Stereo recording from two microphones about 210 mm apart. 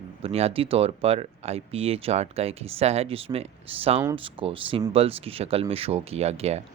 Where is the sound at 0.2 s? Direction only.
30° right (ahead or behind).